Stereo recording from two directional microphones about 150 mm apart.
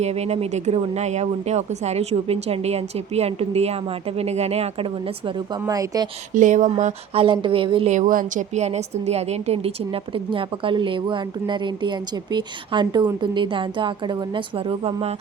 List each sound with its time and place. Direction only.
0.0 s speech: 45° right (ahead or behind)
5.6 s speech: 25° right (ahead or behind)
6.3 s speech: 55° right (ahead or behind)
7.2 s a woman's voice: 35° right (ahead or behind)
7.9 s a woman's voice: 60° right (ahead or behind); by 15.1 s 40° right (ahead or behind)